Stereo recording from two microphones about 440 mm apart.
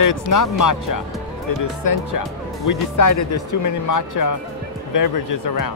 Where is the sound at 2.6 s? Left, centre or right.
Left.